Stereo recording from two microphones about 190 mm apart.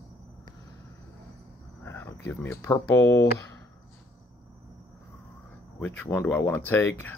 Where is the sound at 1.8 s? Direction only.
10° left (ahead or behind).